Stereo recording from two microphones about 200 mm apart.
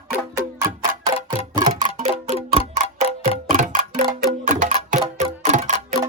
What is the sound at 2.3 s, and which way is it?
Clock, 30° right (ahead or behind).